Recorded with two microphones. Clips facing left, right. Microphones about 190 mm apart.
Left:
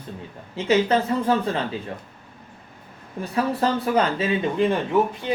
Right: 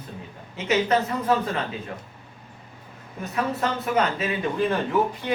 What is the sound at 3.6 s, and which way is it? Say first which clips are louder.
Speech: left 3 dB; 30° left (ahead or behind).